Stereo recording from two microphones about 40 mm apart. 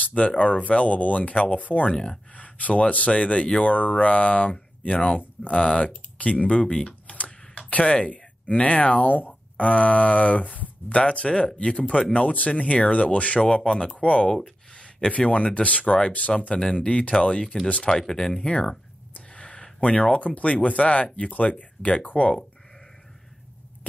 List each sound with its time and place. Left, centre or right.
0.0 s a sound: left
0.4 s speech: left
13.4 s speech: left
13.9 s speech: left
14.3 s speech: left
16.1 s speech: left
16.3 s speech: left
19.1 s speech: left